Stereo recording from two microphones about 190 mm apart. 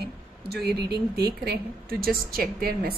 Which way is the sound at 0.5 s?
60° right (ahead or behind).